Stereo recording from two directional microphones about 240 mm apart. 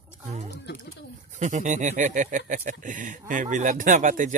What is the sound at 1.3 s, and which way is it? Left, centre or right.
Speech, right.